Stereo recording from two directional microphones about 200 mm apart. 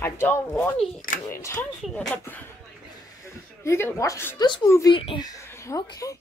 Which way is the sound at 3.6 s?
10° left (ahead or behind).